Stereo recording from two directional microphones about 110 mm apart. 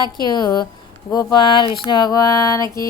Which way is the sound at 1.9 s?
40° left (ahead or behind).